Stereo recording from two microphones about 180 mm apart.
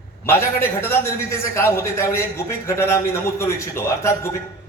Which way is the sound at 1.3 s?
15° left (ahead or behind).